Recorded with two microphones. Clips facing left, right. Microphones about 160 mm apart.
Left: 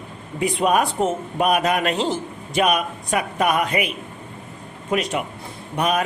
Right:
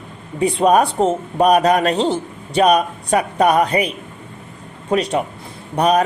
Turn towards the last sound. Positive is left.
turn(degrees=-35)  # may be behind; listen again after turning